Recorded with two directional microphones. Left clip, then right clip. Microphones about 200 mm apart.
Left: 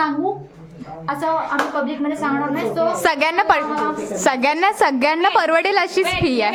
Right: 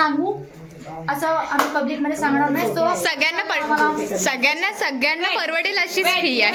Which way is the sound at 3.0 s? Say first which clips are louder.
Left 4 dB; 35° left (ahead or behind).